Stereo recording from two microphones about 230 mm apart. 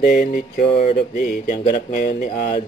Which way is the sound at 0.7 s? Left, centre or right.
Left.